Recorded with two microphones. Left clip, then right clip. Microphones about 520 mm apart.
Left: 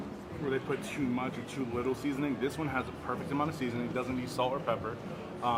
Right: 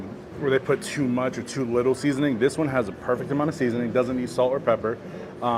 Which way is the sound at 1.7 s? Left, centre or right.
Right.